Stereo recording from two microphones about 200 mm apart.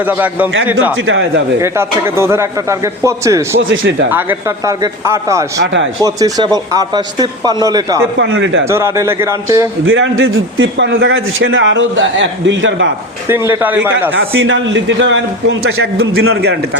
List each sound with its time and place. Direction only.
0.0 s a man's voice: 10° right (ahead or behind)
0.9 s a man's voice: 70° right (ahead or behind)
1.6 s a man's voice: 15° right (ahead or behind)
3.6 s a man's voice: 70° right (ahead or behind)
4.1 s a man's voice: 10° right (ahead or behind)
5.5 s a man's voice: 65° right (ahead or behind)
6.0 s a man's voice: 15° right (ahead or behind)
8.2 s a man's voice: 70° right (ahead or behind)
8.6 s a man's voice: 15° right (ahead or behind)
9.8 s a man's voice: 80° right
13.2 s a man's voice: 10° right (ahead or behind)
14.2 s a man's voice: 75° right (ahead or behind)
16.3 s a man's voice: 55° right (ahead or behind)